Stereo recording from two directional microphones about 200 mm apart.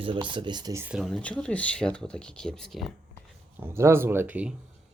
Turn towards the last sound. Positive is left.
turn(degrees=-5)  # may be behind; listen again after turning